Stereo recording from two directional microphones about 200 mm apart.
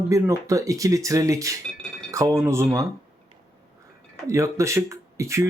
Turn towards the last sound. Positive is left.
turn(degrees=-15)  # may be behind; listen again after turning